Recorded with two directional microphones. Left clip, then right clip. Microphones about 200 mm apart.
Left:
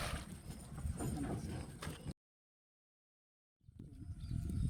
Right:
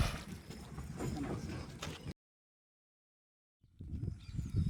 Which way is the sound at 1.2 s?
55° left (ahead or behind).